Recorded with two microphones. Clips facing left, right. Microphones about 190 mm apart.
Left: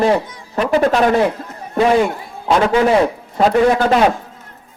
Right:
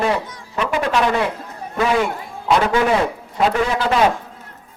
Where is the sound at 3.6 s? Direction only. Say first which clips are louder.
Left 6 dB; 50° left (ahead or behind).